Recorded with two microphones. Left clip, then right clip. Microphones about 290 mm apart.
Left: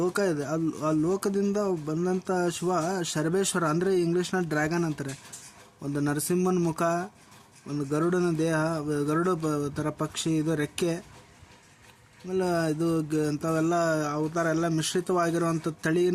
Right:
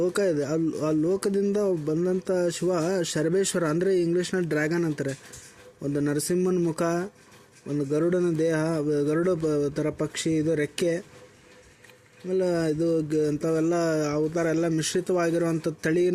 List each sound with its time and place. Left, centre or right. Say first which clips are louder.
0.0 s speech: right 3 dB; centre
12.3 s speech: right 2 dB; centre